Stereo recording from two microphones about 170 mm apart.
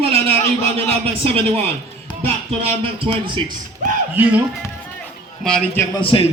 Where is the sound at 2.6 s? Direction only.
35° right (ahead or behind).